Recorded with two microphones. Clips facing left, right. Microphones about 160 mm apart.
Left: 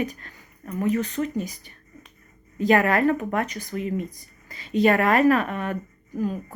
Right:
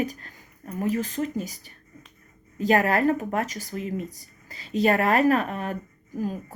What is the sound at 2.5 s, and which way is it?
Speech, 35° right (ahead or behind).